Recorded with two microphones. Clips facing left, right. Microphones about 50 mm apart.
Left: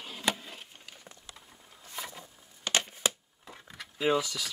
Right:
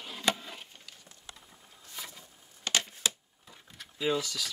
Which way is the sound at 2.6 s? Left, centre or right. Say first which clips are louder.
Left 1 dB; left.